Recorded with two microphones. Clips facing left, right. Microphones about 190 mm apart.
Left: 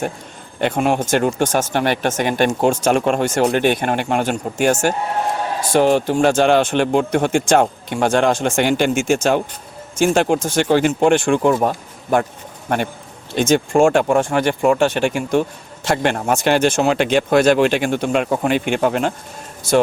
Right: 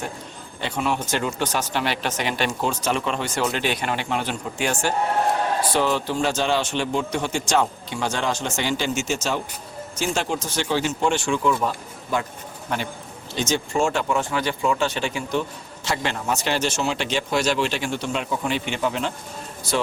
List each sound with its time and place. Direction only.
0.6 s a man's voice: 55° left (ahead or behind)